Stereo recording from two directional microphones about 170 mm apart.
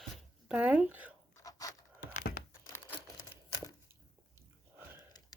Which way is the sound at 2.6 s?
15° left (ahead or behind).